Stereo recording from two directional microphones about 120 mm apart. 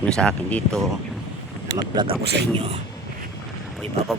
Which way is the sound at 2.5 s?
60° right (ahead or behind).